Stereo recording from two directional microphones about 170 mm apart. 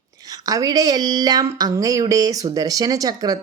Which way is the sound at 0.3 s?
20° right (ahead or behind).